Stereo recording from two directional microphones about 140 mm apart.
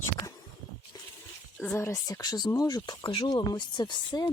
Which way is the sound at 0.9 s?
25° left (ahead or behind).